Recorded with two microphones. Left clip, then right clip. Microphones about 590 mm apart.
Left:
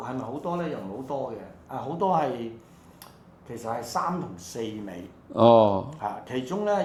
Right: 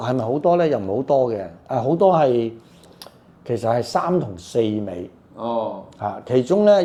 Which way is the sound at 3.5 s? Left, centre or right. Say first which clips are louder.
Right 12 dB; right.